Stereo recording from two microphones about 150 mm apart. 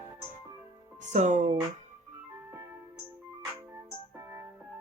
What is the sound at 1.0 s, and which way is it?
Speech, 50° right (ahead or behind).